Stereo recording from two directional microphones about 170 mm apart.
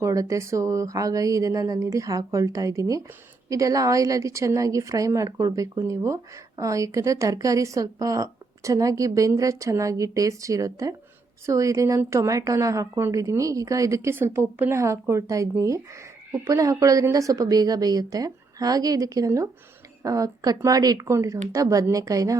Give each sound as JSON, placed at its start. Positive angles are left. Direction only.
{"t": 0.0, "sound": "a woman's voice", "side_deg": -20}